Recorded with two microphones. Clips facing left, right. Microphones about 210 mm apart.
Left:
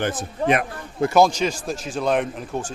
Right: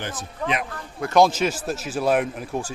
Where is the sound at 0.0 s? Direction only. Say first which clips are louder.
Left 6 dB; 50° left (ahead or behind).